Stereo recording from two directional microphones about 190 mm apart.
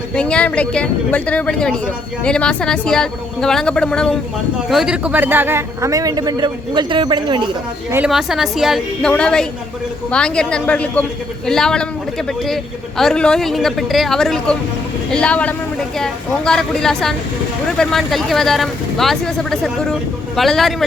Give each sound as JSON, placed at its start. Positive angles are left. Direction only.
{"t": 0.1, "sound": "a man's voice", "side_deg": 5}
{"t": 7.9, "sound": "speech", "side_deg": -5}
{"t": 13.0, "sound": "speech", "side_deg": 5}